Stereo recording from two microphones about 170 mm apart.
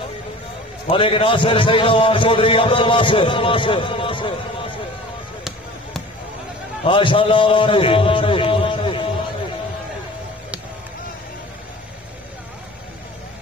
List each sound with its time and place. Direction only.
0.8 s a man's voice: 30° left (ahead or behind)
6.8 s a man's voice: 30° left (ahead or behind)